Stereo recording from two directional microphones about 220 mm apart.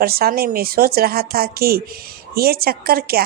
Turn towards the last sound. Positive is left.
turn(degrees=-45)  # may be behind; listen again after turning